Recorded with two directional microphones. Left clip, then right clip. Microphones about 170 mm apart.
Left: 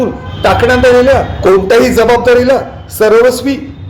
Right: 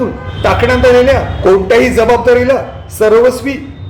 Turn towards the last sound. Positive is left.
turn(degrees=25)  # may be behind; listen again after turning